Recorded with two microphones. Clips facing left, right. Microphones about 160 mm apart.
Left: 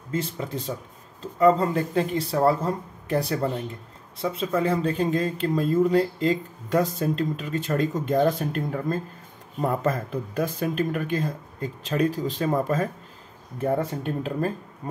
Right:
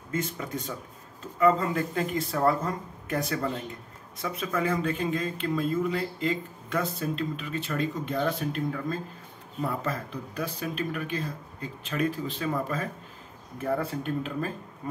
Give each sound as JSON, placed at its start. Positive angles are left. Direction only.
{"t": 0.1, "sound": "speech", "side_deg": 30}
{"t": 13.6, "sound": "speech", "side_deg": 25}